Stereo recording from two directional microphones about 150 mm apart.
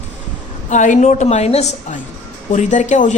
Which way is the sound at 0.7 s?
55° left (ahead or behind).